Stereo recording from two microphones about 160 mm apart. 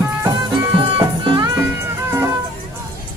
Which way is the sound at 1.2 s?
30° right (ahead or behind).